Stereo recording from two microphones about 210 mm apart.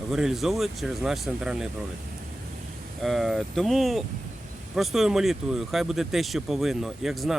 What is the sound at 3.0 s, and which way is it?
Speech, centre (ahead or behind).